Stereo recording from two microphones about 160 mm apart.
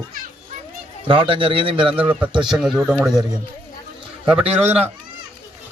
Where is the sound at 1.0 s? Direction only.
35° right (ahead or behind).